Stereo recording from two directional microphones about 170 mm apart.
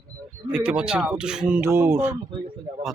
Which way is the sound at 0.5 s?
5° right (ahead or behind).